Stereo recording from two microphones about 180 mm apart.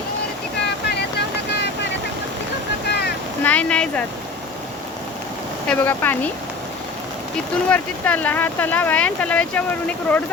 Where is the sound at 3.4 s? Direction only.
5° left (ahead or behind).